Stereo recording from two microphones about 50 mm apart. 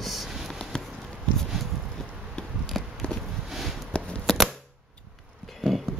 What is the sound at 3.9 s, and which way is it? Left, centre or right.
Scissors, left.